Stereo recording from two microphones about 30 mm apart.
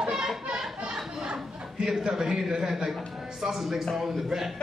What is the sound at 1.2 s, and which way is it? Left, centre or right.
Chatter, right.